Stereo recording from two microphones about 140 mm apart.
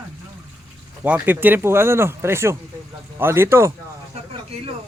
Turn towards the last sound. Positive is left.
turn(degrees=-20)  # may be behind; listen again after turning